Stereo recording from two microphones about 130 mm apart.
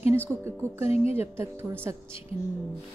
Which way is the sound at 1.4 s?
20° right (ahead or behind).